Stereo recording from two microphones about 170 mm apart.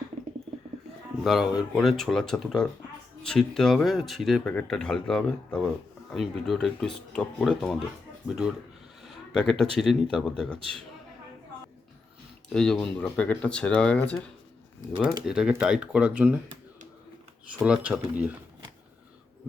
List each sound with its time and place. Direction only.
1.2 s speech: centre (ahead or behind)
9.0 s a sound: 5° left (ahead or behind)
9.7 s speech: centre (ahead or behind)
12.5 s speech: 5° left (ahead or behind)
15.3 s speech: 5° right (ahead or behind)
17.5 s speech: 5° right (ahead or behind)